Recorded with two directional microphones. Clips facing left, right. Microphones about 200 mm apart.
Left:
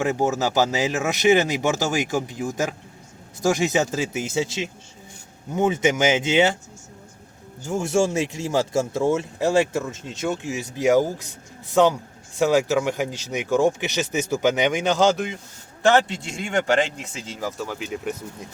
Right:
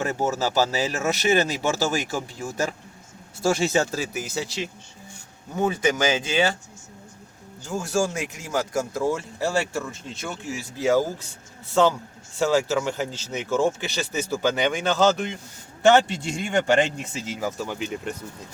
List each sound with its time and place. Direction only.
0.0 s speech: 15° left (ahead or behind)
7.7 s speech: 25° left (ahead or behind)
15.8 s speech: centre (ahead or behind)